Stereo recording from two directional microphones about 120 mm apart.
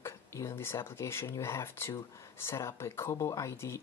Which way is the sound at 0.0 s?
25° left (ahead or behind).